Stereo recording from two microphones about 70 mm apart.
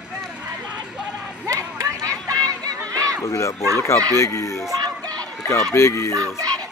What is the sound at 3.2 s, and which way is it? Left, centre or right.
Speech, left.